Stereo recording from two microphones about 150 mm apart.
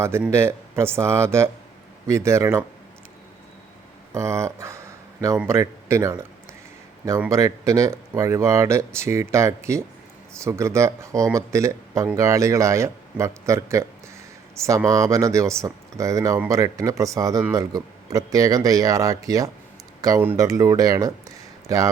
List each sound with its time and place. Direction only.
0.0 s speech: 15° right (ahead or behind)
4.1 s a sound: 20° right (ahead or behind)
5.5 s speech: 20° right (ahead or behind)
7.3 s speech: 20° right (ahead or behind)
14.8 s speech: 20° right (ahead or behind)